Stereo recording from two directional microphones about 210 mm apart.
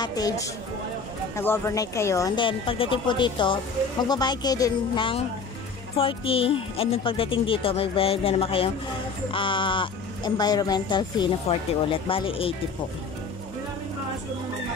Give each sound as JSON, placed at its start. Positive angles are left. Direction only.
{"t": 0.0, "sound": "speech", "side_deg": 20}